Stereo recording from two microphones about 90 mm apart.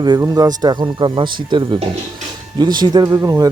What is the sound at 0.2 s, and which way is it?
Speech, 45° right (ahead or behind).